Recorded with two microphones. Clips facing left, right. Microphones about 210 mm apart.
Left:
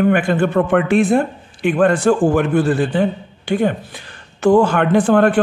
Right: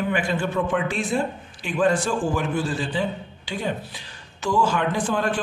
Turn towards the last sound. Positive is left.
turn(degrees=60)  # may be behind; listen again after turning